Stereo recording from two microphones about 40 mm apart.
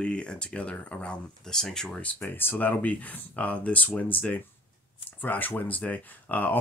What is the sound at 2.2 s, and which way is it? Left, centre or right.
Speech, left.